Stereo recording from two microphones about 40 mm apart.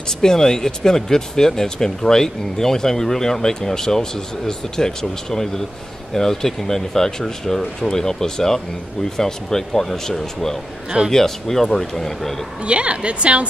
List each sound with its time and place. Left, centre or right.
0.2 s speech: centre
12.6 s a woman's voice: right